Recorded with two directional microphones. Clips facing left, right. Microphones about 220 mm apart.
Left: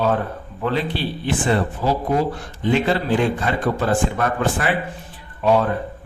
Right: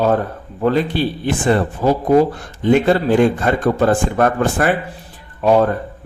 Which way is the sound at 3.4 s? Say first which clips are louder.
Right 6 dB; 50° right (ahead or behind).